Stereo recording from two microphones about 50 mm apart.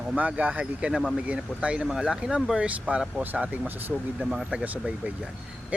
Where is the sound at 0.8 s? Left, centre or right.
Centre.